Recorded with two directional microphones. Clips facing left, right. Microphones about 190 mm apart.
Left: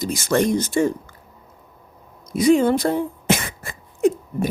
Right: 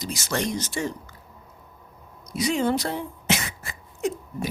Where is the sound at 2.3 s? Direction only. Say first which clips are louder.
Left 8 dB; 50° left (ahead or behind).